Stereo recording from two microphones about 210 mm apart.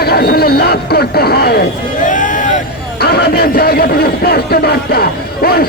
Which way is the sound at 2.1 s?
35° left (ahead or behind).